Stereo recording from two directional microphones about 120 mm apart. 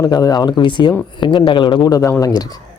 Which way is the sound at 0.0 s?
30° left (ahead or behind).